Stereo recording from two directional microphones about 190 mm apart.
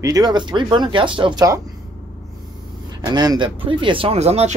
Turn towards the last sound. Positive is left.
turn(degrees=-35)  # may be behind; listen again after turning